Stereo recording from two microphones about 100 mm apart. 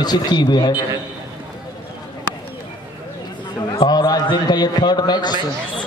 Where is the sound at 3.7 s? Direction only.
40° left (ahead or behind).